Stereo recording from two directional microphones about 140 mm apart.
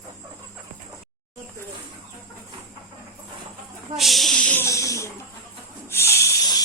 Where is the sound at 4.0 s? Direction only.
Centre (ahead or behind).